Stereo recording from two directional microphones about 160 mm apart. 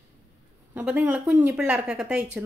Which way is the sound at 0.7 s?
10° right (ahead or behind).